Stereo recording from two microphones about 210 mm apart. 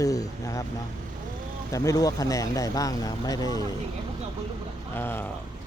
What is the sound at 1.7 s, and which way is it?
Speech, 15° left (ahead or behind).